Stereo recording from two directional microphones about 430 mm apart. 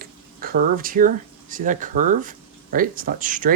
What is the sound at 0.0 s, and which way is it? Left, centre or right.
Speech, centre.